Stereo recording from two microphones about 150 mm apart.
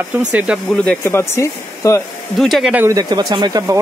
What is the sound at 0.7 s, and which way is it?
Speech, 5° left (ahead or behind).